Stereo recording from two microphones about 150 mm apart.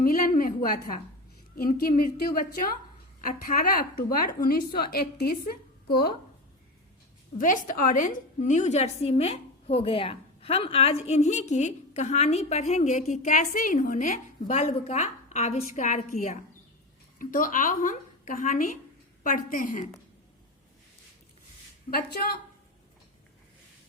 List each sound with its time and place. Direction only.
0.0 s a sound: 70° left (ahead or behind)
1.5 s a woman's voice: 70° left (ahead or behind)
4.4 s a woman's voice: 90° left
7.3 s a woman's voice: 60° left (ahead or behind)
21.8 s a woman's voice: 90° left